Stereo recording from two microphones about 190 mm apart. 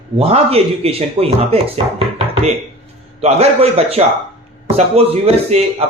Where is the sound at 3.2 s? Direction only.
35° right (ahead or behind).